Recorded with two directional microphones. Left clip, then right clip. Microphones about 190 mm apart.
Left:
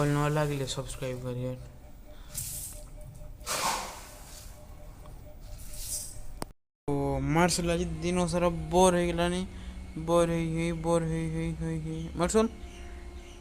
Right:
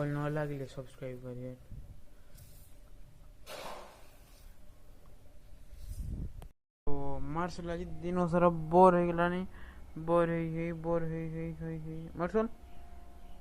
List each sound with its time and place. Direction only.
0.0 s speech: 15° right (ahead or behind)
6.9 s a sound: 10° left (ahead or behind)
7.3 s speech: 20° left (ahead or behind)
7.7 s mantra: 5° left (ahead or behind)
8.1 s speech: 25° right (ahead or behind)
8.9 s speech: 10° right (ahead or behind)
10.1 s mantra: 15° right (ahead or behind)